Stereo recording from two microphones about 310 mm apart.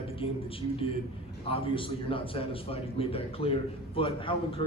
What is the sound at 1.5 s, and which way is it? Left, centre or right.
A man's voice, centre.